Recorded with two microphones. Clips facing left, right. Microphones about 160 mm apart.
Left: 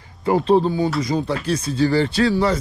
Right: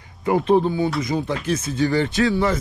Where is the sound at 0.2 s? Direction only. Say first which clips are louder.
Left 1 dB; 30° left (ahead or behind).